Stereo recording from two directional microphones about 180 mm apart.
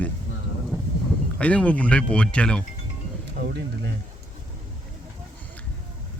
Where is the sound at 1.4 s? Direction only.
5° left (ahead or behind).